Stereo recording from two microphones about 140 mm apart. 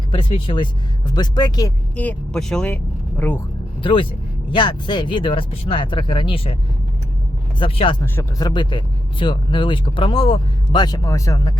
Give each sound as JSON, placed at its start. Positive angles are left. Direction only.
{"t": 0.1, "sound": "speech", "side_deg": 40}
{"t": 2.0, "sound": "speech", "side_deg": 10}
{"t": 3.8, "sound": "speech", "side_deg": 40}
{"t": 7.6, "sound": "speech", "side_deg": 35}
{"t": 8.0, "sound": "speech", "side_deg": 15}
{"t": 8.4, "sound": "speech", "side_deg": 30}